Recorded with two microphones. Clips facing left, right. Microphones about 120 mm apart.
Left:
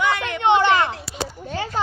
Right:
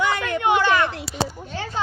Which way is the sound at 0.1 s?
25° left (ahead or behind).